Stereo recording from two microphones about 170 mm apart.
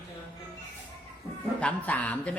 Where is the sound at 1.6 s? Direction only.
10° left (ahead or behind).